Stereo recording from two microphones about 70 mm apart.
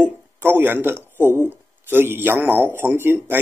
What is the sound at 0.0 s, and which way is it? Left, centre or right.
Speech, right.